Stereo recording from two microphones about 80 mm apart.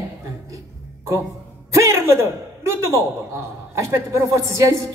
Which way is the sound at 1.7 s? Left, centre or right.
Right.